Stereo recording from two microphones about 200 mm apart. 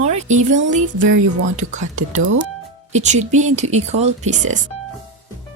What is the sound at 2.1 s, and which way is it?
Speech, 80° right.